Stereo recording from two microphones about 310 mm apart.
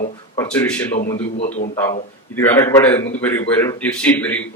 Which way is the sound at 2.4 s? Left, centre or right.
Centre.